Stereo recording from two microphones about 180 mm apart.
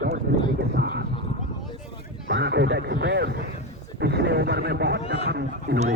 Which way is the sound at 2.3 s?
70° right (ahead or behind).